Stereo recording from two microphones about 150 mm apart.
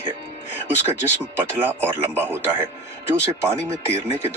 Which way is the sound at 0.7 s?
15° right (ahead or behind).